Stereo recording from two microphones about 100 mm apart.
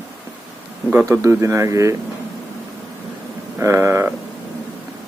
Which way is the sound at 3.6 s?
30° right (ahead or behind).